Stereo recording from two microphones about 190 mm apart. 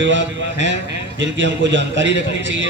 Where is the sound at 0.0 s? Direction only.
75° right (ahead or behind).